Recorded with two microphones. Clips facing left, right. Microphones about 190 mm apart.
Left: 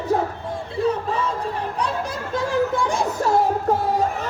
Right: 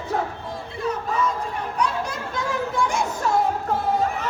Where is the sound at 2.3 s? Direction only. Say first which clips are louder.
Left 4 dB; 30° left (ahead or behind).